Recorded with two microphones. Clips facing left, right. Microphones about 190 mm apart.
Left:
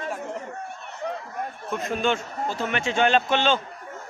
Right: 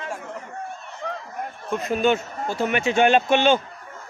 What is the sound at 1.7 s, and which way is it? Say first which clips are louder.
A man's voice: right 4 dB; centre (ahead or behind).